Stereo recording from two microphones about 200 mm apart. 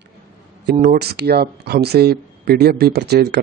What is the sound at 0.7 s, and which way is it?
Speech, 50° right (ahead or behind).